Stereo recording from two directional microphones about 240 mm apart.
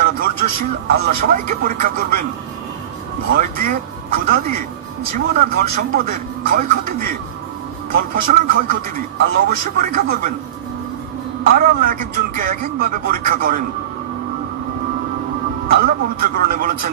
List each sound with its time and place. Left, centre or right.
0.0 s a man's voice: right
3.3 s a man's voice: right
11.4 s a man's voice: right
15.7 s a man's voice: right